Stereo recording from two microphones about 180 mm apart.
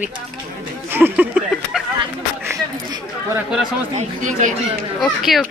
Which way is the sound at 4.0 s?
40° right (ahead or behind).